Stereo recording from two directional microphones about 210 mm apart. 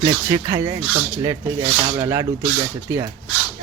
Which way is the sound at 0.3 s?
15° right (ahead or behind).